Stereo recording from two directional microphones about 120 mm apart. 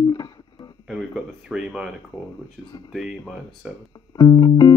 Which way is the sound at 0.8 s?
Centre (ahead or behind).